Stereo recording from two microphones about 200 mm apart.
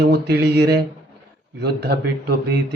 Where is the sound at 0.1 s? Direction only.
55° right (ahead or behind).